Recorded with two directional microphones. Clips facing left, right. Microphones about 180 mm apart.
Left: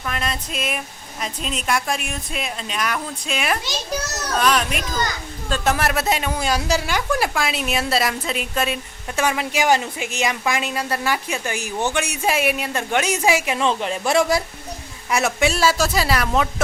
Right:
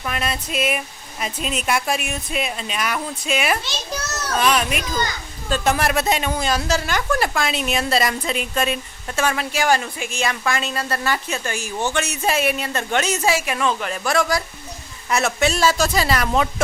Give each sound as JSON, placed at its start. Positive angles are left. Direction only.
{"t": 0.0, "sound": "speech", "side_deg": -5}
{"t": 9.1, "sound": "a woman's voice", "side_deg": 15}
{"t": 15.1, "sound": "speech", "side_deg": 10}